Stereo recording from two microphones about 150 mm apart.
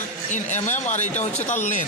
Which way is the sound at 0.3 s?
55° left (ahead or behind).